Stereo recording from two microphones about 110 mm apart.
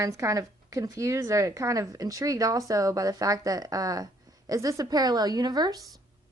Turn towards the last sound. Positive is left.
turn(degrees=-40)  # may be behind; listen again after turning